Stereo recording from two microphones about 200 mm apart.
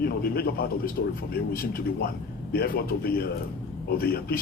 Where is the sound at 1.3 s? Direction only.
45° left (ahead or behind).